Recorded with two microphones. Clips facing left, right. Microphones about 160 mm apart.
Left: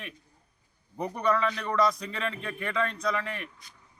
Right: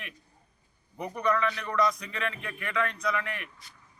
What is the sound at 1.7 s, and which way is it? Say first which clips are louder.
A man's voice: left 1 dB; 35° left (ahead or behind).